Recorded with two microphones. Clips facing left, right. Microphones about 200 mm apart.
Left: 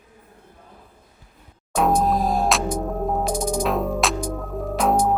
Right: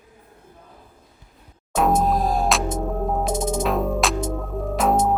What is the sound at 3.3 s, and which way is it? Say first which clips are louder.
Music: even; 25° right (ahead or behind).